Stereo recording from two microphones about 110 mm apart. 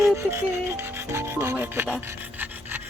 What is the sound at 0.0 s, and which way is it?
Rub, 25° right (ahead or behind).